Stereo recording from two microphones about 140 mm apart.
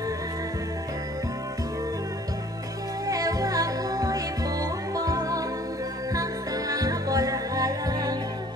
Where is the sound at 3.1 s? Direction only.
25° right (ahead or behind).